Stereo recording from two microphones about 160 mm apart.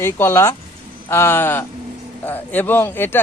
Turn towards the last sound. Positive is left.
turn(degrees=15)  # may be behind; listen again after turning